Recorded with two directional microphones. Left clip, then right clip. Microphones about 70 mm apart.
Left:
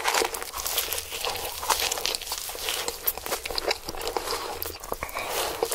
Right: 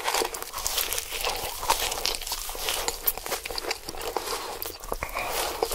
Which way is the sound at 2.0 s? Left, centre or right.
Right.